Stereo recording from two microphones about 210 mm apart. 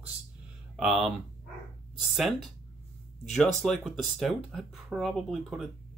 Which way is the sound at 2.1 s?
Centre (ahead or behind).